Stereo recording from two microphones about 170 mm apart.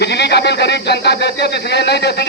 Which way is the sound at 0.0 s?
80° left.